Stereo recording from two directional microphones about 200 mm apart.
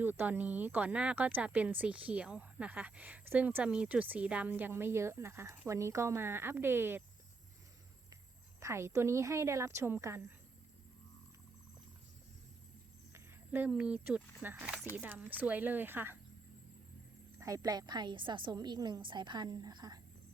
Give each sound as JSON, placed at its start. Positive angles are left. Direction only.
{"t": 0.0, "sound": "speech", "side_deg": -10}
{"t": 8.6, "sound": "speech", "side_deg": -15}
{"t": 13.1, "sound": "speech", "side_deg": -10}
{"t": 17.4, "sound": "a woman's voice", "side_deg": -15}